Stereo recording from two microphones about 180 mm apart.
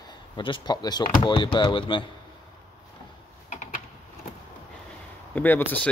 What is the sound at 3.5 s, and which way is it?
Typing, 45° left (ahead or behind).